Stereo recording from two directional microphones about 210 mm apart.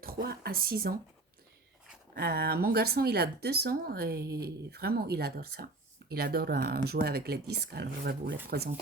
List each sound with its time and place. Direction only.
0.0 s speech: 45° right (ahead or behind)
2.1 s speech: 50° right (ahead or behind)